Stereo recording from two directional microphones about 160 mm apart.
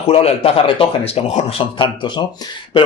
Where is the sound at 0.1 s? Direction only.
35° left (ahead or behind).